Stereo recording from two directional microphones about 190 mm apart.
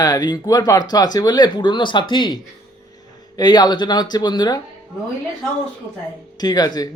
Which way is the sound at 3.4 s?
20° left (ahead or behind).